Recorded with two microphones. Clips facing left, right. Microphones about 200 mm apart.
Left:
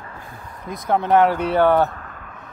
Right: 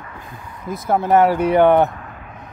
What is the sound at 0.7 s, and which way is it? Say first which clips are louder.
Speech: right 2 dB; 5° right (ahead or behind).